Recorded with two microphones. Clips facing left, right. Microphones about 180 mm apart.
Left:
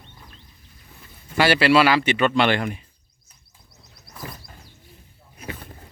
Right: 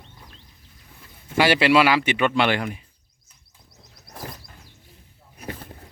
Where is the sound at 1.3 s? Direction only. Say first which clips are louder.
Even; 15° right (ahead or behind).